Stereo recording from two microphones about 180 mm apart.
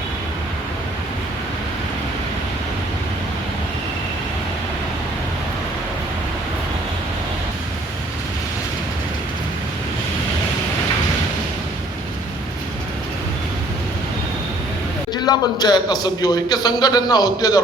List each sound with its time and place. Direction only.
15.1 s a man's voice: 25° left (ahead or behind)